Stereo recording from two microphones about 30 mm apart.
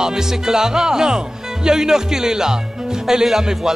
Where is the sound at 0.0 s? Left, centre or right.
Centre.